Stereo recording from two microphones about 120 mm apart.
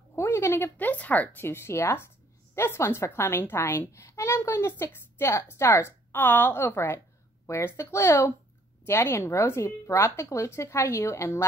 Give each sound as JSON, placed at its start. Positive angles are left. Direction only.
{"t": 0.1, "sound": "a child's voice", "side_deg": 25}